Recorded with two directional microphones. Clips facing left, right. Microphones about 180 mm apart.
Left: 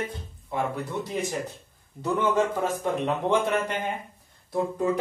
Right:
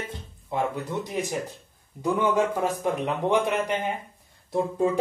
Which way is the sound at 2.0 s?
10° right (ahead or behind).